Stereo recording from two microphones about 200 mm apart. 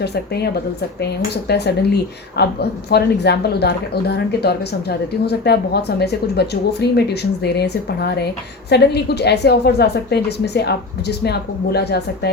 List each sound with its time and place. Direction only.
1.5 s a woman's voice: 55° left (ahead or behind)